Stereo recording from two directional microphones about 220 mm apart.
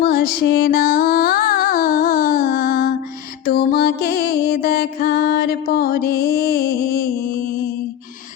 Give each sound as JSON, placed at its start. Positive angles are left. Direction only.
{"t": 0.0, "sound": "music", "side_deg": 45}